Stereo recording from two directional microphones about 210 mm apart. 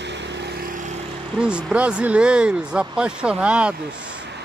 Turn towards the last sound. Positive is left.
turn(degrees=-5)  # may be behind; listen again after turning